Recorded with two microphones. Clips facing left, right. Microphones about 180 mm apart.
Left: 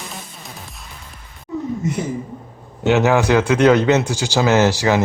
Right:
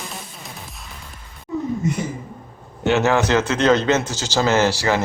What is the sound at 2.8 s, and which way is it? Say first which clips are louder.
Speech: left 2 dB; 15° left (ahead or behind).